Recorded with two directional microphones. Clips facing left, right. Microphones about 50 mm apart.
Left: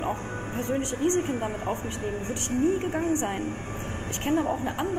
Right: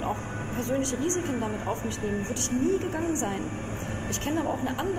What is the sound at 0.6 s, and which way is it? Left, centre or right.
Speech, left.